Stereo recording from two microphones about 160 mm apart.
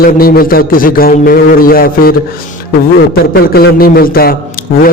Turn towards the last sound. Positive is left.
turn(degrees=65)  # may be behind; listen again after turning